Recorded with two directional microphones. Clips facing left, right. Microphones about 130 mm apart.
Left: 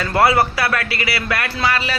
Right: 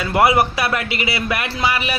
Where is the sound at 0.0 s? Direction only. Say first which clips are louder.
Even; 15° right (ahead or behind).